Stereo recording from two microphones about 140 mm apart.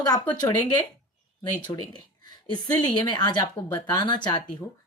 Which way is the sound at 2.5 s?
30° left (ahead or behind).